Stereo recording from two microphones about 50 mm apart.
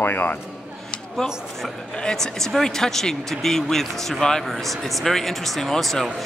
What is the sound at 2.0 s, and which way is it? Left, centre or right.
Speech, centre.